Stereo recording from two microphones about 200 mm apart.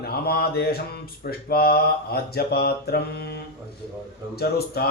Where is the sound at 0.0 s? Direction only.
50° left (ahead or behind).